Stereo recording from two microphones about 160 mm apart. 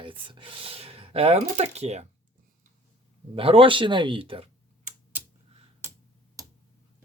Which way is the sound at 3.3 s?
35° right (ahead or behind).